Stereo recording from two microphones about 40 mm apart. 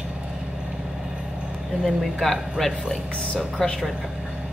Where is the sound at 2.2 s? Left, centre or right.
Centre.